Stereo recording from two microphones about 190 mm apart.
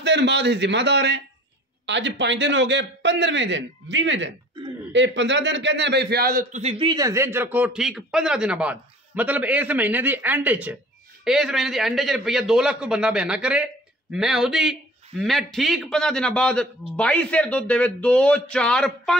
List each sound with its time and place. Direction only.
0.0 s a man's voice: 65° right (ahead or behind); by 19.1 s 5° left (ahead or behind)